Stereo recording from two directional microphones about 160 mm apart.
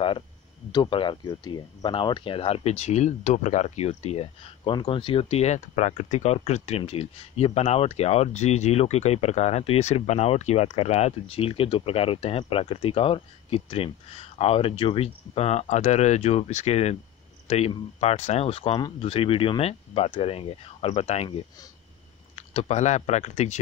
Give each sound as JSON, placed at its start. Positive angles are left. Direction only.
{"t": 0.7, "sound": "speech", "side_deg": 30}